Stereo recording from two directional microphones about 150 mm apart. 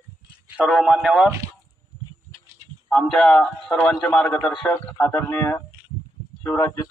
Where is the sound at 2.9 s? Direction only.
5° left (ahead or behind); by 6.9 s 20° left (ahead or behind).